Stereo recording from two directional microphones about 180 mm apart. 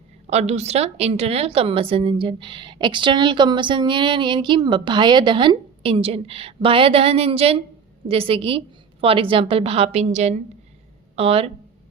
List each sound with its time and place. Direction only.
0.3 s a woman's voice: 35° right (ahead or behind)